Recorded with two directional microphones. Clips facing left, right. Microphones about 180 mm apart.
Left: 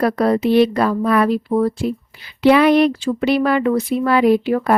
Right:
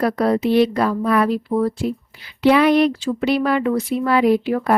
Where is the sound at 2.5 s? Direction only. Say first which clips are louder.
Left 2 dB; 70° left (ahead or behind).